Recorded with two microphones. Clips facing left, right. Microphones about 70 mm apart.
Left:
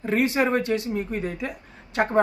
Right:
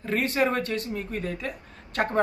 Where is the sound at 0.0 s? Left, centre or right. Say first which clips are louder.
Left 3 dB; centre.